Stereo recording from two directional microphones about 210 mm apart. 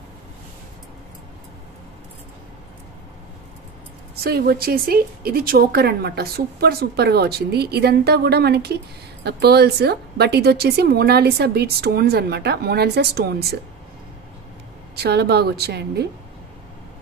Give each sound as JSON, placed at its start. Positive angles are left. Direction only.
{"t": 4.2, "sound": "a woman's voice", "side_deg": -45}
{"t": 15.0, "sound": "a woman's voice", "side_deg": -50}